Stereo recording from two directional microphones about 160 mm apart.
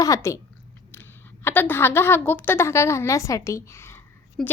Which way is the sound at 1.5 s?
10° left (ahead or behind).